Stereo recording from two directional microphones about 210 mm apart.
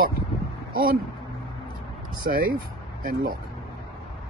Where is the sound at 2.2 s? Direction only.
45° right (ahead or behind).